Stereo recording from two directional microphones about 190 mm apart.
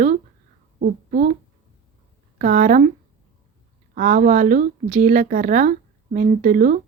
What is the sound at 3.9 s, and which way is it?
Speech, 45° right (ahead or behind).